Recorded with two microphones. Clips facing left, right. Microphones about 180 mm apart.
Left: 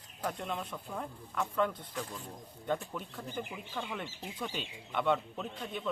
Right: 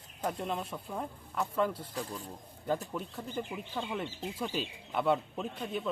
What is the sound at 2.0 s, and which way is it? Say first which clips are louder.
Speech: even; 35° right (ahead or behind).